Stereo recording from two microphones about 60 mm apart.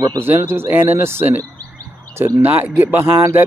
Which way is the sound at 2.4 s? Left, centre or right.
Right.